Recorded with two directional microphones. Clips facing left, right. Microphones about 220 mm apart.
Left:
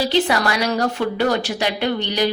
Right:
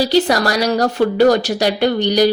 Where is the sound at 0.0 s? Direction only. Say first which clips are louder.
Right 4 dB; 40° right (ahead or behind).